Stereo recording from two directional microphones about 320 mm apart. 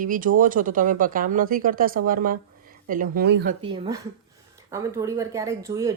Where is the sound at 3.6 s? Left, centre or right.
Centre.